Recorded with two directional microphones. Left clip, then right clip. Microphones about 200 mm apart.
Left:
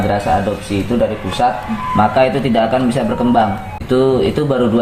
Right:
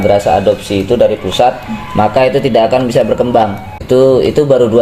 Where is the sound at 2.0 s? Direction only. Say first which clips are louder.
Right 4 dB; 30° right (ahead or behind).